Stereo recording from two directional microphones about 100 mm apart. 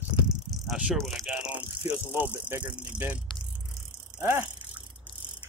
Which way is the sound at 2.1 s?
15° right (ahead or behind).